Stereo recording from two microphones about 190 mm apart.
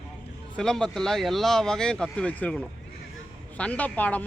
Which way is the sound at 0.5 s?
5° left (ahead or behind).